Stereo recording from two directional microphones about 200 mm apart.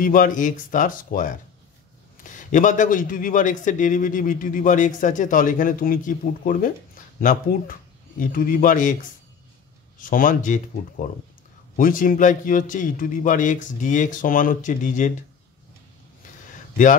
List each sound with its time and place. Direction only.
0.0 s a man's voice: 40° left (ahead or behind)
9.9 s a man's voice: 45° left (ahead or behind)